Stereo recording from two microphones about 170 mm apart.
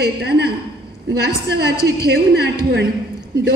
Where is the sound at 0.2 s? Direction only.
70° right (ahead or behind).